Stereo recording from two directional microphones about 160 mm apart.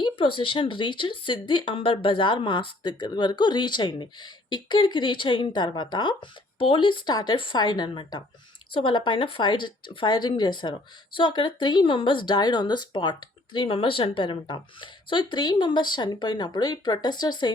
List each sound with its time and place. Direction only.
0.0 s speech: 35° left (ahead or behind)